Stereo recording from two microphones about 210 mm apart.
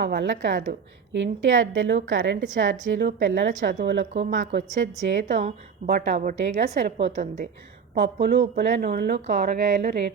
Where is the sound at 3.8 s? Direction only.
60° right (ahead or behind).